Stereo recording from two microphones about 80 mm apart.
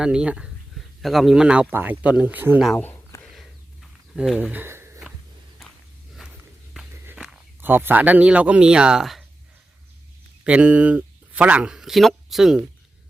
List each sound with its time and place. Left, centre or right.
0.0 s speech: centre
1.7 s speech: right
3.3 s a sound: centre
4.5 s speech: right
7.6 s speech: right; by 9.2 s centre
10.4 s speech: centre